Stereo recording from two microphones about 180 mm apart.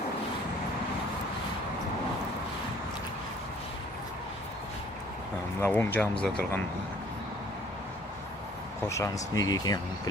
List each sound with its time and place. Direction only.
5.5 s speech: 10° left (ahead or behind)
8.9 s speech: 15° left (ahead or behind)